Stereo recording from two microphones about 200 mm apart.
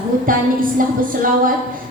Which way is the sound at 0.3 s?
45° right (ahead or behind).